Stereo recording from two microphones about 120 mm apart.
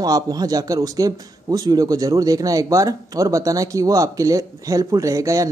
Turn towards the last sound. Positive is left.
turn(degrees=-25)  # may be behind; listen again after turning